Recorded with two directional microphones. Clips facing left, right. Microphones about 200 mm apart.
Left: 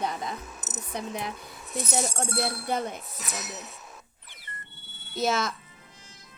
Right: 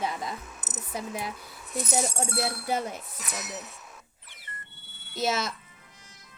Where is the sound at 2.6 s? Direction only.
5° right (ahead or behind).